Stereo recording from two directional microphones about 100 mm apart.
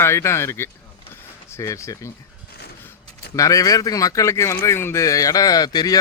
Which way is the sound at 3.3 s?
35° left (ahead or behind).